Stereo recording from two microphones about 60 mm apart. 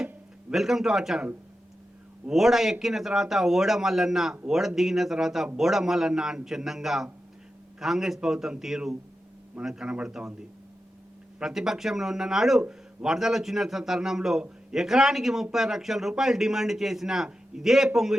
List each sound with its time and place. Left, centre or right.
0.5 s a man's voice: centre
2.3 s a man's voice: centre
11.3 s a man's voice: centre